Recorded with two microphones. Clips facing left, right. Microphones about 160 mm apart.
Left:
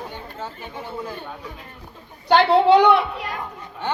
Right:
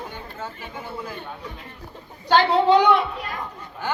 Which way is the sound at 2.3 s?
60° left (ahead or behind).